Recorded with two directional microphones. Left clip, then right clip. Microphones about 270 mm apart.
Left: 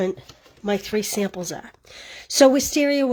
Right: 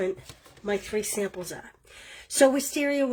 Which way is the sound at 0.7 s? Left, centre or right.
Left.